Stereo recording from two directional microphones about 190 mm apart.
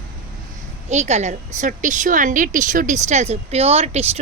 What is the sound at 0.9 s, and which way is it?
Speech, 35° right (ahead or behind).